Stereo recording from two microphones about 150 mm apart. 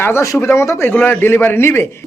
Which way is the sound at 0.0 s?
20° left (ahead or behind).